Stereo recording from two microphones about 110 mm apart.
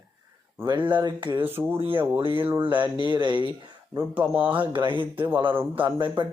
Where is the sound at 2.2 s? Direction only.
55° right (ahead or behind).